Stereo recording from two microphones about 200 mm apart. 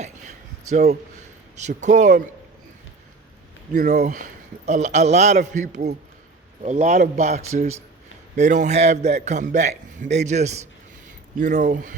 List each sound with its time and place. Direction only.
0.0 s a sound: 35° right (ahead or behind)
0.7 s a man's voice: 35° right (ahead or behind)
4.0 s a man's voice: 40° right (ahead or behind)